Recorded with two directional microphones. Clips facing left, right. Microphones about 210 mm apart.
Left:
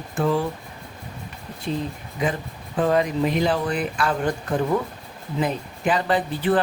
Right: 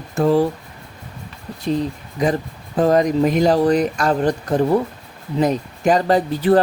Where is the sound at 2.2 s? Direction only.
40° right (ahead or behind).